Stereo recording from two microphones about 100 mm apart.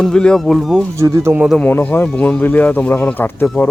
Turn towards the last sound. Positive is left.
turn(degrees=20)  # may be behind; listen again after turning